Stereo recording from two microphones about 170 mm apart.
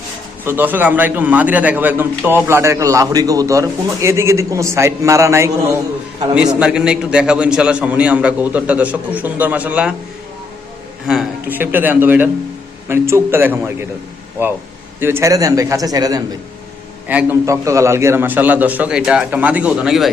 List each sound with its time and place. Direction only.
0.4 s a man's voice: 10° right (ahead or behind)
11.0 s a man's voice: 5° right (ahead or behind); by 16.2 s 20° right (ahead or behind)
17.1 s a man's voice: 10° right (ahead or behind)